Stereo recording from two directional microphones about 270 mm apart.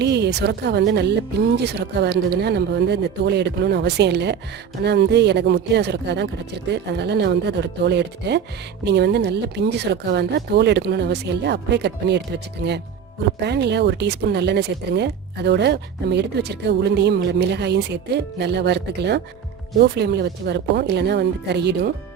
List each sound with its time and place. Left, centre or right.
0.0 s speech: right